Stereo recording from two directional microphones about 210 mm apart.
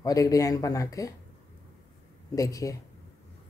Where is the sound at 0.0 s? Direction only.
15° left (ahead or behind).